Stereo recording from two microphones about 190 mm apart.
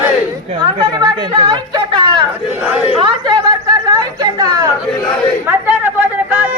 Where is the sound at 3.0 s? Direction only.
25° right (ahead or behind); by 6.5 s 10° right (ahead or behind).